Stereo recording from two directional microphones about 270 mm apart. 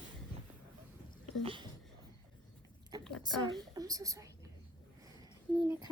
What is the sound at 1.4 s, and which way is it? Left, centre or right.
Speech, centre.